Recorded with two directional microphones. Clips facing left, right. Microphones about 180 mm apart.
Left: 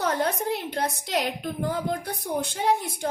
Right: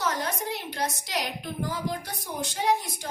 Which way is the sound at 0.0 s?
55° left (ahead or behind).